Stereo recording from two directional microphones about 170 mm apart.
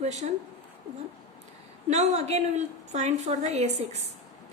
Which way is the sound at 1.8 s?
40° right (ahead or behind).